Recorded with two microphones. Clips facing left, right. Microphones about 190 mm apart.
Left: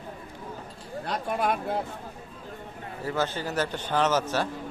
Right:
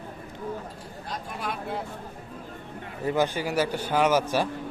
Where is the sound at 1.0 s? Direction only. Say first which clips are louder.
Left 7 dB; 60° left (ahead or behind).